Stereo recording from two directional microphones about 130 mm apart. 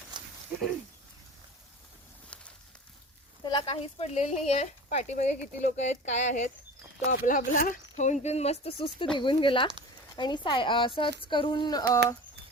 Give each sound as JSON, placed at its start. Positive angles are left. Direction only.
{"t": 0.1, "sound": "a sound", "side_deg": -35}
{"t": 3.4, "sound": "speech", "side_deg": 40}
{"t": 7.1, "sound": "a woman's voice", "side_deg": 90}